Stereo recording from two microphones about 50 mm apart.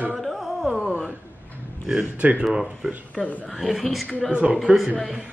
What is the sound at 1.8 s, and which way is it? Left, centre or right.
Speech, centre.